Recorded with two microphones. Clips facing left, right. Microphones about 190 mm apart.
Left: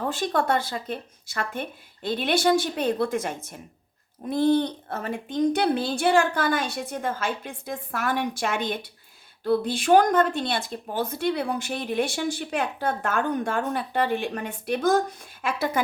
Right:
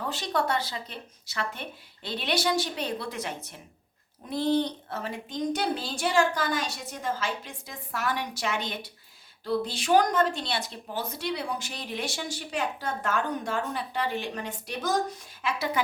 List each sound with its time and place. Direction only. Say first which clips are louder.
0.0 s speech: left 4 dB; 50° left (ahead or behind)